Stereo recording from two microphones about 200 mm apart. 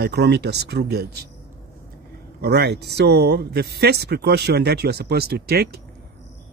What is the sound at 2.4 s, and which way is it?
Speech, 55° right (ahead or behind).